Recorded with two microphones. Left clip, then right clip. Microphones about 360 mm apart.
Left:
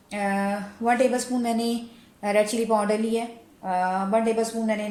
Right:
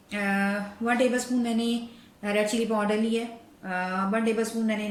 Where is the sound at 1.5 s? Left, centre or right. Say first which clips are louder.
Left 3 dB; centre.